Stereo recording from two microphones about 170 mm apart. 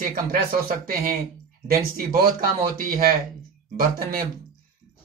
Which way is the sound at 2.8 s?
60° right (ahead or behind).